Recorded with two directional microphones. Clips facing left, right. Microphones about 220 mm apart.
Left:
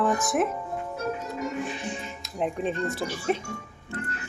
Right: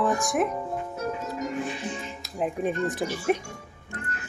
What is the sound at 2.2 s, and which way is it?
Speech, 5° right (ahead or behind).